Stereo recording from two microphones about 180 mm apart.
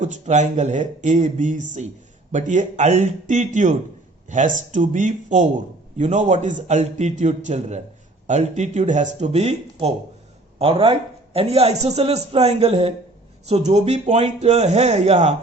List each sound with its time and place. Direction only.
0.0 s a man's voice: 40° right (ahead or behind)